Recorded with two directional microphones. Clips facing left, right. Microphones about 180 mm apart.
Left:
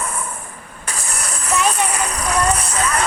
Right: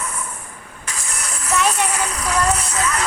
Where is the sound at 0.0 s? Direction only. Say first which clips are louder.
Left 3 dB; 55° left (ahead or behind).